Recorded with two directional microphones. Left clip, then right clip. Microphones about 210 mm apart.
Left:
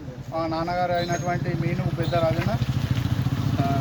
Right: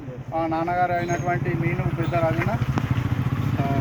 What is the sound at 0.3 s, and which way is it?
Speech, 15° left (ahead or behind).